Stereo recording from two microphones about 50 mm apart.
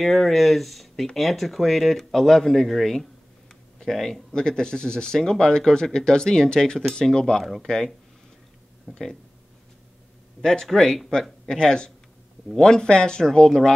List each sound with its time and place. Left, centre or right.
0.0 s speech: centre
10.4 s speech: centre